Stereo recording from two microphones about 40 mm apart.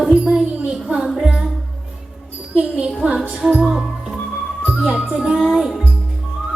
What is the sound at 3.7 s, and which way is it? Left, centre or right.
Music, centre.